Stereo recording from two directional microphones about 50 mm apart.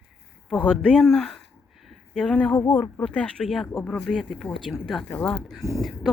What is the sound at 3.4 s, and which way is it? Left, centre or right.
Speech, centre.